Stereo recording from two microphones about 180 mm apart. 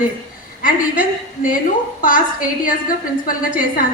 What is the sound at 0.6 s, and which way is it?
A woman's voice, 50° left (ahead or behind).